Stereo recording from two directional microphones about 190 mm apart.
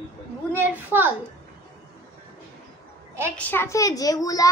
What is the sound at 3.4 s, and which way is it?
A child's voice, 10° left (ahead or behind).